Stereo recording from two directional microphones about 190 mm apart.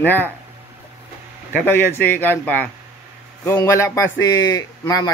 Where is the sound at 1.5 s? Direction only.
10° left (ahead or behind).